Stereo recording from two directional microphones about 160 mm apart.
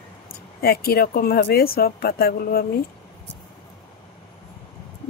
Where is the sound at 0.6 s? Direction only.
75° left (ahead or behind).